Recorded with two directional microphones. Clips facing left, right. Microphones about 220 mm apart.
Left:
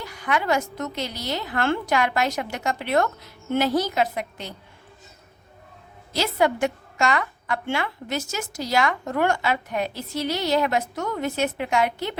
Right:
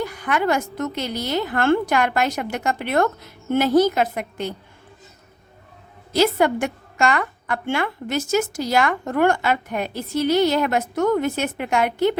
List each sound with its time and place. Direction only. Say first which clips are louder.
0.0 s a woman's voice: right 4 dB; 50° right (ahead or behind)
6.1 s a woman's voice: right 4 dB; 50° right (ahead or behind)